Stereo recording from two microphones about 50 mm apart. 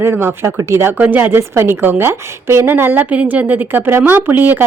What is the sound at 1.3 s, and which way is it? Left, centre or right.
A woman's voice, right.